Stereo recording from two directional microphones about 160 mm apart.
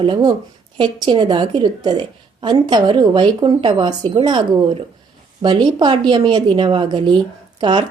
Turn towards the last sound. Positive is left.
turn(degrees=-30)  # may be behind; listen again after turning